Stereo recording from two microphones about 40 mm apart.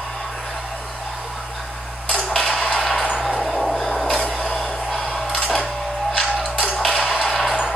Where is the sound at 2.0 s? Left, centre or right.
Centre.